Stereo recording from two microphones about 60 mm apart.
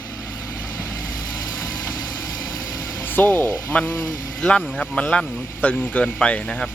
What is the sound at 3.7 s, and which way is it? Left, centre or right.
Speech, centre.